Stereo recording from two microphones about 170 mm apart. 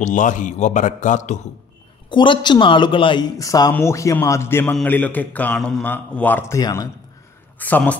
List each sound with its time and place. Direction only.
0.0 s a man's voice: 50° left (ahead or behind)
2.0 s a man's voice: 30° left (ahead or behind); by 8.0 s 10° left (ahead or behind)